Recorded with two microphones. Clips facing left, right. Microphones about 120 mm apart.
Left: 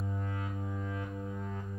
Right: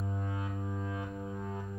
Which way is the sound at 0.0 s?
15° right (ahead or behind).